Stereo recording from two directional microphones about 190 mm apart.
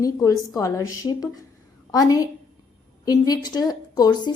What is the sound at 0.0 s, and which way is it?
A woman's voice, 20° left (ahead or behind).